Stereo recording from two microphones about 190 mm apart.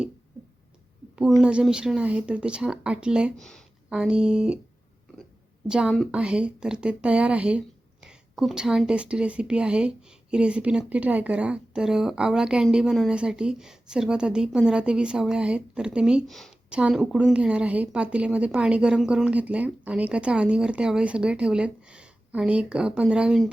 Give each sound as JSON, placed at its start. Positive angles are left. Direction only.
{"t": 1.4, "sound": "a woman's voice", "side_deg": -5}
{"t": 5.6, "sound": "a woman's voice", "side_deg": -5}